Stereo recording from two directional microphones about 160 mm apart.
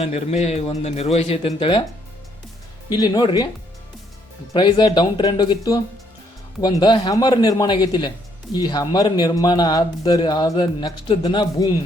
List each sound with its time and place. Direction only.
0.0 s speech: 40° left (ahead or behind)
2.9 s a man's voice: 25° left (ahead or behind)
4.5 s a man's voice: 30° left (ahead or behind)